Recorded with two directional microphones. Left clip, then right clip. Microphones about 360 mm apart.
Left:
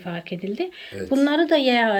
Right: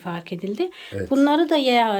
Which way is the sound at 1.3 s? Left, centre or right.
Centre.